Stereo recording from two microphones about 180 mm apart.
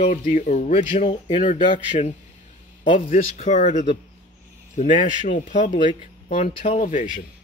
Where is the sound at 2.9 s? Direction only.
45° left (ahead or behind).